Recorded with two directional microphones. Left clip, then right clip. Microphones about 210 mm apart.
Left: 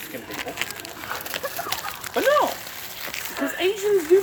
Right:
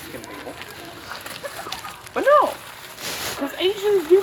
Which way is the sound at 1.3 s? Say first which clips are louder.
Left 4 dB; 45° left (ahead or behind).